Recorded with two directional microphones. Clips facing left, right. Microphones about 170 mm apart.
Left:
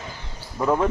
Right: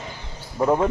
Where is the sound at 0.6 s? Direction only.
25° right (ahead or behind).